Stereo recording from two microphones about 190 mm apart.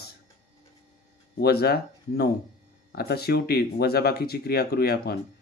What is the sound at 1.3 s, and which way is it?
Speech, 55° left (ahead or behind).